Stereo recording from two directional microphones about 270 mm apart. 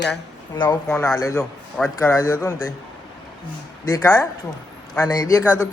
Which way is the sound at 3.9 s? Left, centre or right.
Centre.